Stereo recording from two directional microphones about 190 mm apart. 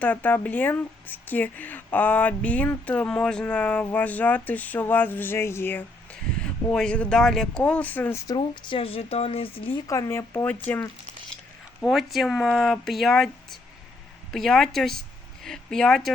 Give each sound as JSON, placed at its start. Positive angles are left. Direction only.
{"t": 0.0, "sound": "speech", "side_deg": 10}
{"t": 8.4, "sound": "speech", "side_deg": 25}